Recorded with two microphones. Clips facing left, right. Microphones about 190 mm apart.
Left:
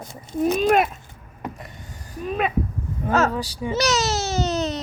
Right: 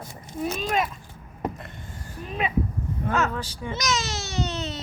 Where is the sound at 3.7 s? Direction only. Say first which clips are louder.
Left 7 dB; 40° left (ahead or behind).